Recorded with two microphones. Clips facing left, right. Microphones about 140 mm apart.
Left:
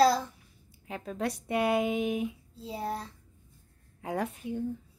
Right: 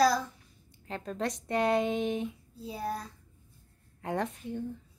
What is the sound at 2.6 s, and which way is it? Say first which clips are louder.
Speech: left 1 dB; 25° left (ahead or behind).